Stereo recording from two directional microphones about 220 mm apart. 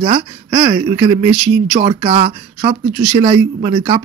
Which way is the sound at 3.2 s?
25° right (ahead or behind).